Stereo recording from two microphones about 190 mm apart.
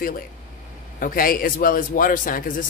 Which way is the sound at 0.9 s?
50° left (ahead or behind).